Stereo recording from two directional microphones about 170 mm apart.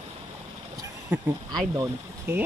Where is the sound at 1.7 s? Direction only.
15° right (ahead or behind).